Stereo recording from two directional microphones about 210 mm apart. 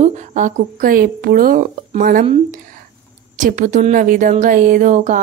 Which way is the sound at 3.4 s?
35° right (ahead or behind).